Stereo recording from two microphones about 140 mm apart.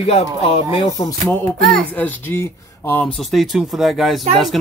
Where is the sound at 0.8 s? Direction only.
30° left (ahead or behind).